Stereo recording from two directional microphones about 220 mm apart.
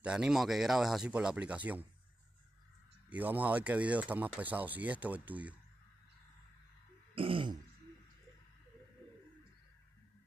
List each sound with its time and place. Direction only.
0.0 s speech: 5° right (ahead or behind)
3.1 s speech: 5° right (ahead or behind)
7.2 s throat clearing: 25° right (ahead or behind)